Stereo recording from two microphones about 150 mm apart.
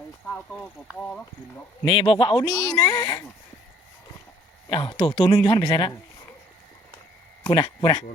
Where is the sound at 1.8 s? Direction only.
35° left (ahead or behind).